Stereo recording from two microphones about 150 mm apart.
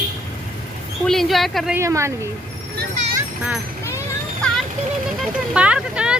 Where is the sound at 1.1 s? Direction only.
Centre (ahead or behind).